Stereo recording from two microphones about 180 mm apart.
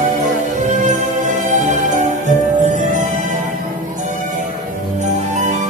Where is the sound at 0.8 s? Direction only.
45° right (ahead or behind).